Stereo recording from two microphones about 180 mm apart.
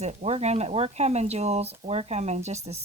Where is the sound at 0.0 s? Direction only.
40° right (ahead or behind).